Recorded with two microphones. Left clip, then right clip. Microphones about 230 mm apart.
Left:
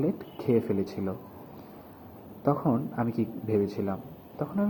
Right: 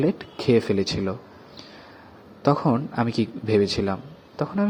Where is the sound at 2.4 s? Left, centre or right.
Right.